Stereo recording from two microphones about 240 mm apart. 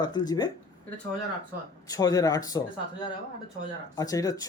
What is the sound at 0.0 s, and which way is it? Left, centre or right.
Speech, centre.